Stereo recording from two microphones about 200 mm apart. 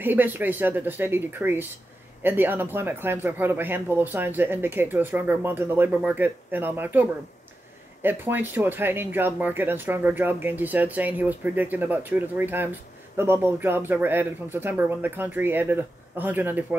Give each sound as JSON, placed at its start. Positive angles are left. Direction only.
{"t": 0.0, "sound": "speech", "side_deg": -10}